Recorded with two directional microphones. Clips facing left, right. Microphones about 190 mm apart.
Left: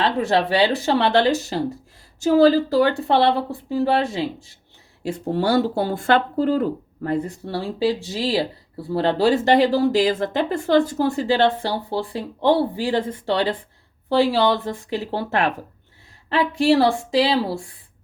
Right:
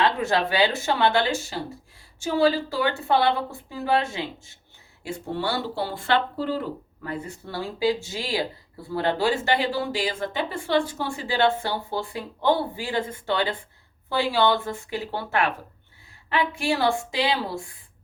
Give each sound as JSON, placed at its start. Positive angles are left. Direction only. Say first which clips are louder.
{"t": 0.0, "sound": "speech", "louder": "left 3 dB", "side_deg": 30}